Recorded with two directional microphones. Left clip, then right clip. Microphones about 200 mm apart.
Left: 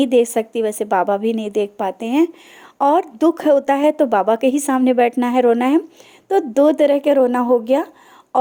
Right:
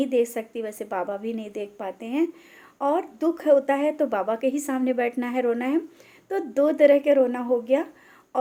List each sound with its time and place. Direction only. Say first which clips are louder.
0.0 s a woman's voice: left 8 dB; 40° left (ahead or behind)